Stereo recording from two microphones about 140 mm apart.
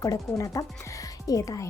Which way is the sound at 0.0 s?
25° left (ahead or behind).